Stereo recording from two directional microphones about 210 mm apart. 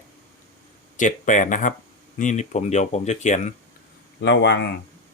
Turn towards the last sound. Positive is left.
turn(degrees=55)  # may be behind; listen again after turning